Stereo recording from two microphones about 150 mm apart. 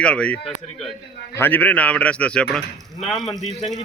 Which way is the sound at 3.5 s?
45° left (ahead or behind).